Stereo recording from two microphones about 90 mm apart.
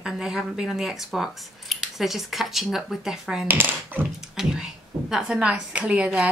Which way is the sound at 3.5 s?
20° right (ahead or behind).